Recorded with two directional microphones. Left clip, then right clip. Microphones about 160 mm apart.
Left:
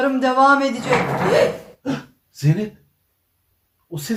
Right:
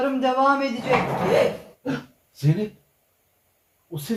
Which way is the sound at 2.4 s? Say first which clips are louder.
Left 3 dB; 15° right (ahead or behind).